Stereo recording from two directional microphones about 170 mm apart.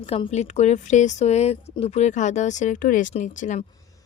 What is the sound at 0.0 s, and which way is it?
Speech, 35° left (ahead or behind).